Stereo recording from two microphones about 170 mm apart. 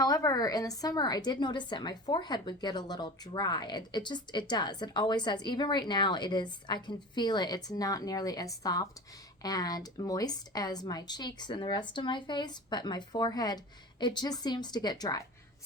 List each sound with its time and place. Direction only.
0.0 s a woman's voice: 20° left (ahead or behind)